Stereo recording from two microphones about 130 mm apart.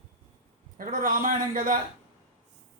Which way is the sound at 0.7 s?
90° right.